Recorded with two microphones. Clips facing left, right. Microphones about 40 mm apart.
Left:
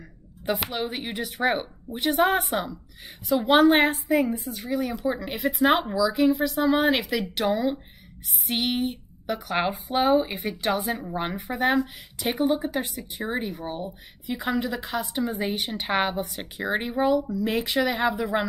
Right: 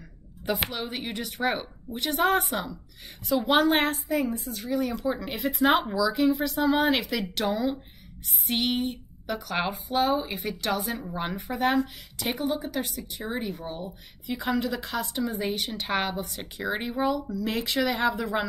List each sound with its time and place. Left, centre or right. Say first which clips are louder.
0.7 s speech: left 3 dB; centre
5.2 s speech: left 2 dB; centre